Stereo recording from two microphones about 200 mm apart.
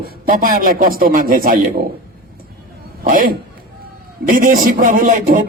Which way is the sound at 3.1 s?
45° right (ahead or behind).